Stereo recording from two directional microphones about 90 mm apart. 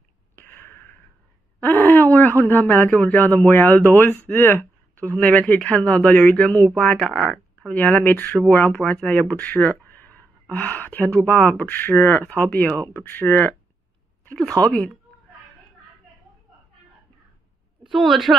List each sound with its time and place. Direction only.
0.4 s a sound: 25° left (ahead or behind)
3.0 s speech: 20° left (ahead or behind)
14.6 s speech: 15° left (ahead or behind)
17.9 s speech: centre (ahead or behind)